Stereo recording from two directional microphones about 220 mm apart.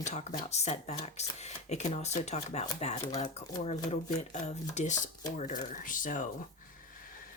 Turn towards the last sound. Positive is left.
turn(degrees=35)  # may be behind; listen again after turning